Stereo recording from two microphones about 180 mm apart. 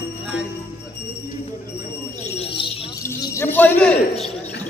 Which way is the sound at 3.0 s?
15° left (ahead or behind).